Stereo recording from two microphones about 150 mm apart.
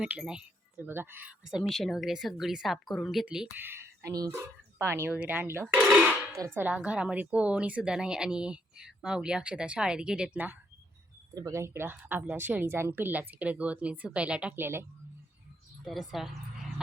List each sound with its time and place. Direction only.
0.0 s speech: 5° right (ahead or behind)
3.7 s a woman's voice: 20° right (ahead or behind)
5.6 s speech: 5° right (ahead or behind)
6.3 s a woman's voice: 20° right (ahead or behind)
15.8 s speech: centre (ahead or behind)